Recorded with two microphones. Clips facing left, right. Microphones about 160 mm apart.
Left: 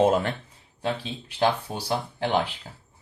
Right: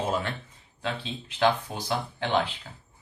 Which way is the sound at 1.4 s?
35° left (ahead or behind).